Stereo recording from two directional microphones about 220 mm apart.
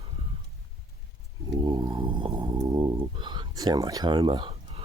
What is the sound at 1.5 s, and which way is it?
Snoring, 20° right (ahead or behind).